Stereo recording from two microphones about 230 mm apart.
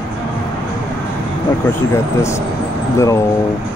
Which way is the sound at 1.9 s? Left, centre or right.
Centre.